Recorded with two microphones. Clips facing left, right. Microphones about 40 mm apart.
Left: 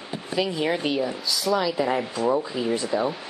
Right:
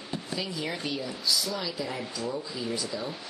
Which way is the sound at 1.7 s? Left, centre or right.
Left.